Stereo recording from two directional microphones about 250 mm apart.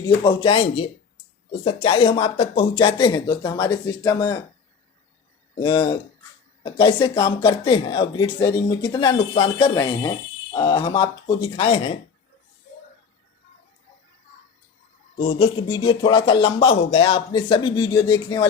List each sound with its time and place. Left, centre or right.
0.0 s speech: centre
5.6 s speech: centre
15.2 s speech: left